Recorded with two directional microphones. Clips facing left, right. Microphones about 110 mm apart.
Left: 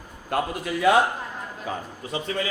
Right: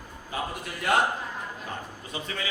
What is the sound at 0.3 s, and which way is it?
Speech, 80° left.